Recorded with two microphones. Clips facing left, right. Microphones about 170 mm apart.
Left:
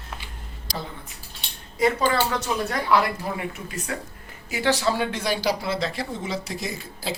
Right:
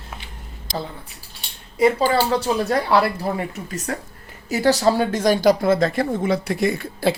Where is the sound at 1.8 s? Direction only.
30° right (ahead or behind); by 7.2 s 60° right (ahead or behind).